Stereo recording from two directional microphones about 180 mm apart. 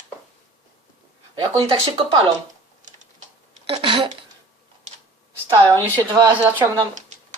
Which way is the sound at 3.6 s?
25° right (ahead or behind).